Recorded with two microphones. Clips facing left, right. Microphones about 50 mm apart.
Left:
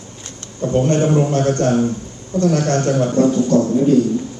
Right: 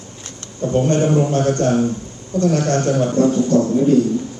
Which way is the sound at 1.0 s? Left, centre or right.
Left.